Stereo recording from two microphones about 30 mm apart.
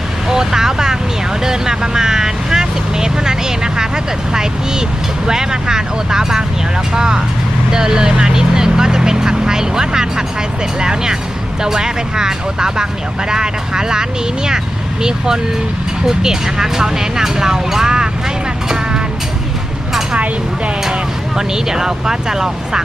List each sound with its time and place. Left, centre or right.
0.3 s vehicle: centre
1.5 s speech: right
16.0 s speech: centre
21.3 s speech: centre